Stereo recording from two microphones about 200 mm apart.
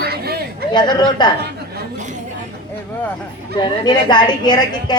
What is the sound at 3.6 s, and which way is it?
A woman's voice, 20° left (ahead or behind).